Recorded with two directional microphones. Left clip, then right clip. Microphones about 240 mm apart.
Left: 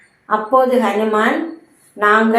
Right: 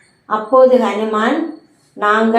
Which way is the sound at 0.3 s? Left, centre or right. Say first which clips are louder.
Right 4 dB; left.